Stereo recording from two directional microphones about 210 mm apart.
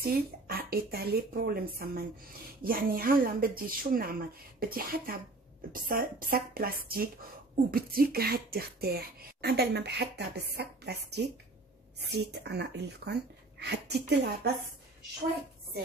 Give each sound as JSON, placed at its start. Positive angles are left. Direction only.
{"t": 0.0, "sound": "speech", "side_deg": -45}